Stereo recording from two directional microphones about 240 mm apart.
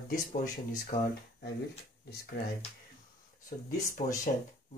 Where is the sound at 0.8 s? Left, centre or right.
Left.